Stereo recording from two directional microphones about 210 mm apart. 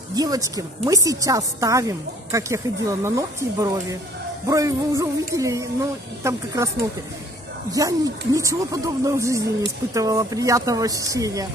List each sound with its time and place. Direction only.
0.1 s a woman's voice: 15° right (ahead or behind)
7.7 s a woman's voice: 15° right (ahead or behind)